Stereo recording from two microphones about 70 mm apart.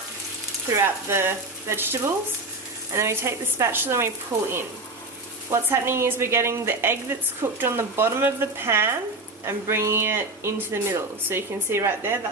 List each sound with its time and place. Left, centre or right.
0.7 s speech: right
5.5 s speech: right